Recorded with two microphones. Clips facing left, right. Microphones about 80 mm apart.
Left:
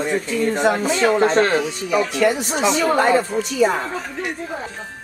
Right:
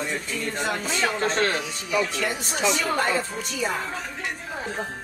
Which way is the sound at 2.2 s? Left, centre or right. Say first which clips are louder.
Left 10 dB; left.